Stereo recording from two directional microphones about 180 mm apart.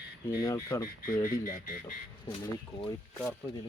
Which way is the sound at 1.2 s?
50° left (ahead or behind).